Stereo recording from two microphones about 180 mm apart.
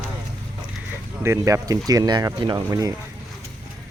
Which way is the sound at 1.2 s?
15° right (ahead or behind).